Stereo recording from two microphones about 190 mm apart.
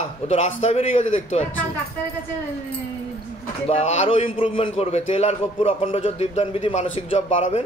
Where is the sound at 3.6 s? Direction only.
35° left (ahead or behind).